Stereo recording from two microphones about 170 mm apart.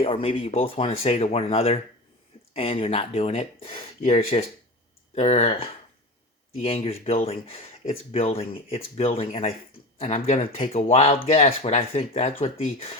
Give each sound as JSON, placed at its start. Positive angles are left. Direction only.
{"t": 0.0, "sound": "speech", "side_deg": 35}